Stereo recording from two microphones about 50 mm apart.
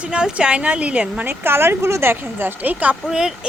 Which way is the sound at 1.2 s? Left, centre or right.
Right.